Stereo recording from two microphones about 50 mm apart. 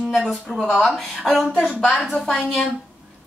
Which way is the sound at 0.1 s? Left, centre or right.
Centre.